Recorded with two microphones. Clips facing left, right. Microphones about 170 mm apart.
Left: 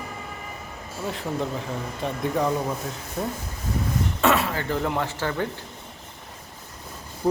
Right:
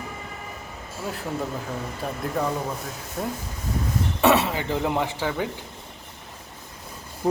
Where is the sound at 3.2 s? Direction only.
Centre (ahead or behind).